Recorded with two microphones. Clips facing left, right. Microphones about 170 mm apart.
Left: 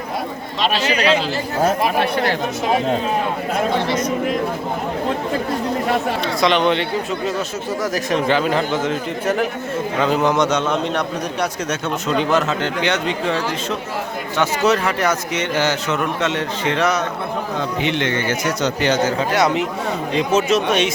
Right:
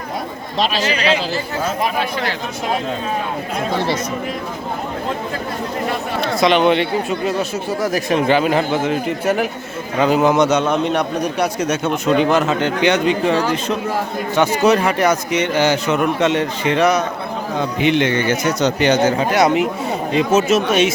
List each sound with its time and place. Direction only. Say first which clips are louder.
0.6 s speech: even; 35° right (ahead or behind)
6.4 s a man's voice: right 3 dB; 10° right (ahead or behind)
7.9 s a man's voice: right 3 dB; 10° right (ahead or behind)